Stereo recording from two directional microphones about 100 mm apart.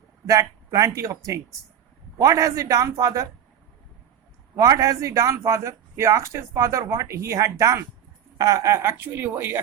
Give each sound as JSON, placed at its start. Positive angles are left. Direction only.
{"t": 0.3, "sound": "a man's voice", "side_deg": -35}
{"t": 4.5, "sound": "a man's voice", "side_deg": -35}